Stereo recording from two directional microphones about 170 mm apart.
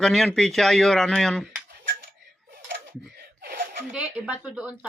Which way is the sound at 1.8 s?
90° right.